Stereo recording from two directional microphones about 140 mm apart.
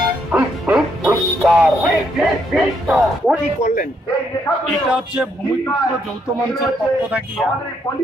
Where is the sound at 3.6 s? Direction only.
60° left (ahead or behind).